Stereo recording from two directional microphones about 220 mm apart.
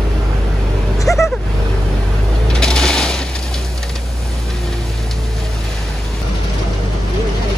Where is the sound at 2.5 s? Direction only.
5° left (ahead or behind).